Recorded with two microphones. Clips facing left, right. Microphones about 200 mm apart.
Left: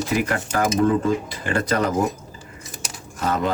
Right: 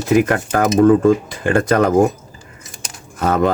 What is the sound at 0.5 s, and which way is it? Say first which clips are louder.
Speech: right 7 dB; 55° right (ahead or behind).